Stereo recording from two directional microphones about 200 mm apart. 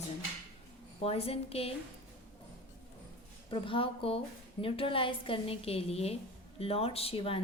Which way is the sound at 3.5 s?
25° left (ahead or behind).